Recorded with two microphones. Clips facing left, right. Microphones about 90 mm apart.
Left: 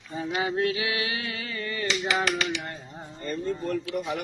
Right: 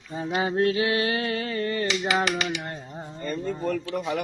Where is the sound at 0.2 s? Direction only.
35° right (ahead or behind).